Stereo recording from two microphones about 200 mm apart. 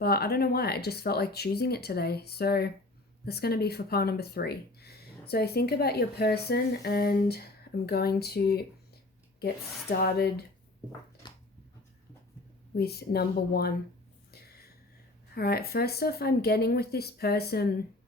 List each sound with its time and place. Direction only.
0.0 s a woman's voice: 50° left (ahead or behind)
12.7 s speech: 50° left (ahead or behind)
15.4 s speech: 50° left (ahead or behind)